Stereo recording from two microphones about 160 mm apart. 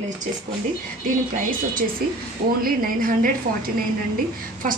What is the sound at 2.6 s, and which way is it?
A woman's voice, 65° right (ahead or behind).